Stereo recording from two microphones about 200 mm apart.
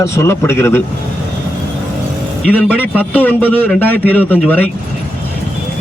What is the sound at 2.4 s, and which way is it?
Speech, 5° left (ahead or behind).